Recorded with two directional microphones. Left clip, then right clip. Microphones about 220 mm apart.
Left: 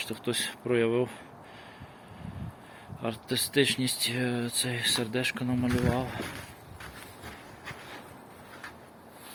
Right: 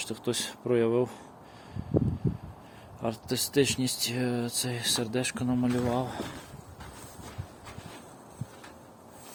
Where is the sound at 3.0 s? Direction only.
15° right (ahead or behind).